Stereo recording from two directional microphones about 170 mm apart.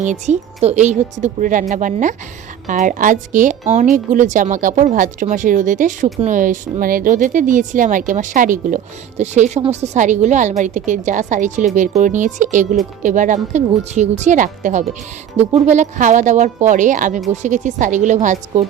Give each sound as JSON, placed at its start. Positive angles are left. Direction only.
{"t": 0.0, "sound": "speech", "side_deg": -45}